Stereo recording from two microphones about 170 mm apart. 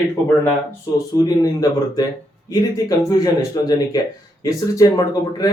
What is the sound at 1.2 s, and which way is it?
Speech, 20° left (ahead or behind).